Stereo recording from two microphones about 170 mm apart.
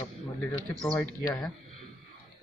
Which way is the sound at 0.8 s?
5° left (ahead or behind).